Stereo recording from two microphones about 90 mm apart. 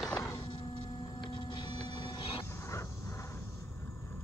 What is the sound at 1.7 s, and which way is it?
Printer, 70° left (ahead or behind).